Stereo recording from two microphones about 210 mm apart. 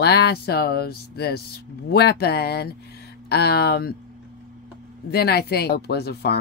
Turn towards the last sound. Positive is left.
turn(degrees=50)  # may be behind; listen again after turning